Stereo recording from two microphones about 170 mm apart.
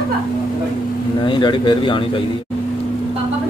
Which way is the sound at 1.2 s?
25° left (ahead or behind).